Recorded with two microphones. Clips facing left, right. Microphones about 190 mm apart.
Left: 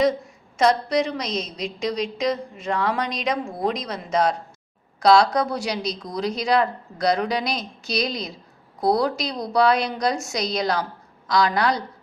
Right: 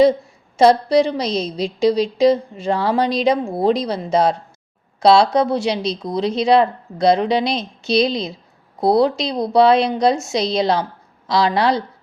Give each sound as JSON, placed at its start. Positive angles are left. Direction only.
{"t": 0.5, "sound": "a woman's voice", "side_deg": -30}